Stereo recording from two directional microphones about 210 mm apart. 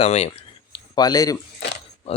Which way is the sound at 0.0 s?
30° left (ahead or behind).